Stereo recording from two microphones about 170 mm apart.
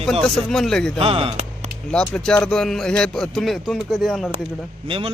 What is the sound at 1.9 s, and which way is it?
Speech, 5° left (ahead or behind).